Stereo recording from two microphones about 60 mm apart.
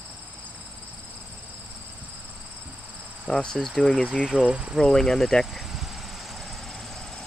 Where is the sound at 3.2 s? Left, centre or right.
Centre.